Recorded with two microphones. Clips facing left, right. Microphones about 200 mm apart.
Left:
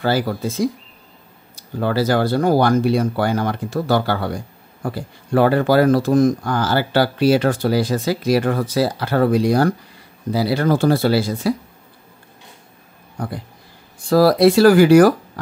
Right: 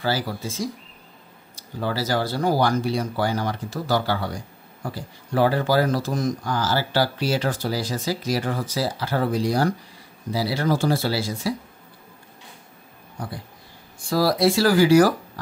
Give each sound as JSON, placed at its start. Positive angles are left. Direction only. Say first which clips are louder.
{"t": 0.0, "sound": "speech", "louder": "left 6 dB", "side_deg": 60}
{"t": 13.2, "sound": "speech", "louder": "left 6 dB", "side_deg": 60}